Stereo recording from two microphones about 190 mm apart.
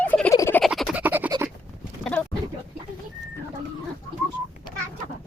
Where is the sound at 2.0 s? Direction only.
5° left (ahead or behind).